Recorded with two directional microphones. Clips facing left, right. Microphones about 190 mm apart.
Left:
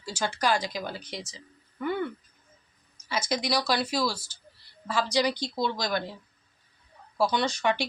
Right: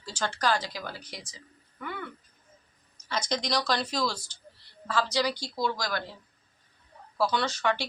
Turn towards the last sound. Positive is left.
turn(degrees=15)  # may be behind; listen again after turning